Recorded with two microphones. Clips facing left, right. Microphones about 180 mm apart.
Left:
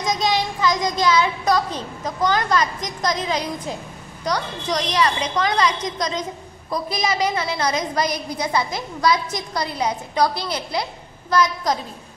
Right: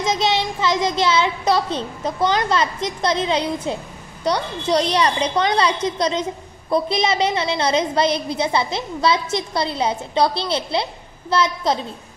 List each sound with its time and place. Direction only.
0.0 s child singing: 25° right (ahead or behind)
0.8 s a woman's voice: 25° right (ahead or behind)